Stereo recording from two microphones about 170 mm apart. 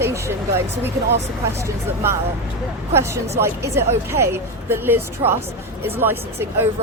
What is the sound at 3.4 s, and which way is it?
Speech, 55° right (ahead or behind).